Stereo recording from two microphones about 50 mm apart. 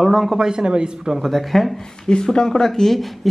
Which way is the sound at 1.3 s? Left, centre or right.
Centre.